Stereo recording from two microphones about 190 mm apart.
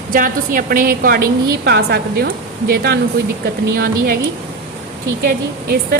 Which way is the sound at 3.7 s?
55° right (ahead or behind).